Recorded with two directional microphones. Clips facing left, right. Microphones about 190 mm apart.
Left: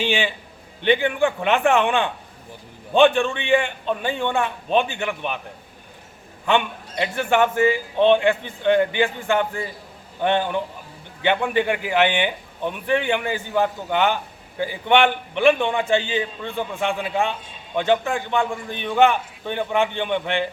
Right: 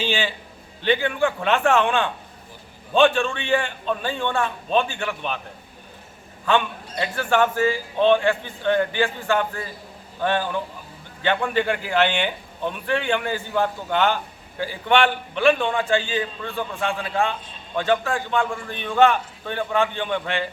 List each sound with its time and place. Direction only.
0.0 s a man's voice: 15° left (ahead or behind)
6.4 s a man's voice: 20° left (ahead or behind)